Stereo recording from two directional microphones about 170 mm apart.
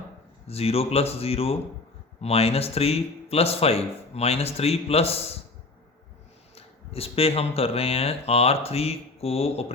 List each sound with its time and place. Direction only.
0.4 s speech: 35° left (ahead or behind)
6.6 s speech: 35° left (ahead or behind)